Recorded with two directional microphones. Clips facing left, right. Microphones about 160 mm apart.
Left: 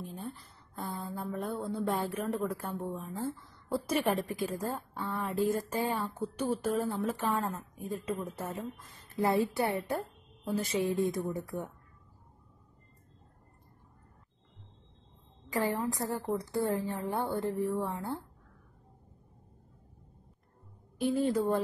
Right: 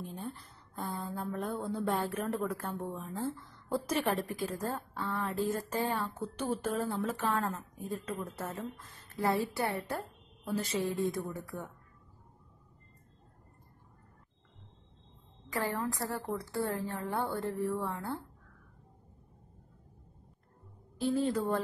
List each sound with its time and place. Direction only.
0.0 s a sound: centre (ahead or behind)
3.2 s a woman's voice: 5° left (ahead or behind)
15.5 s a woman's voice: 20° left (ahead or behind)
21.1 s a woman's voice: 15° left (ahead or behind)